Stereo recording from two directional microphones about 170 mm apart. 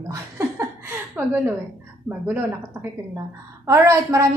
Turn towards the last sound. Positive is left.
turn(degrees=-20)  # may be behind; listen again after turning